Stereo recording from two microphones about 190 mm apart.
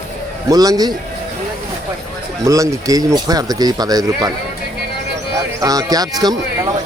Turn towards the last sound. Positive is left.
turn(degrees=-20)  # may be behind; listen again after turning